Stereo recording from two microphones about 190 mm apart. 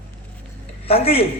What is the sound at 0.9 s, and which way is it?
Speech, 30° left (ahead or behind).